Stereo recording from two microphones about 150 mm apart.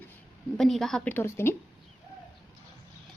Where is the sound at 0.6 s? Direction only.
Centre (ahead or behind).